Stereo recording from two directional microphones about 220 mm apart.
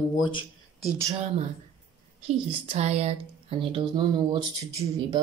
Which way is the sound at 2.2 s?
30° right (ahead or behind).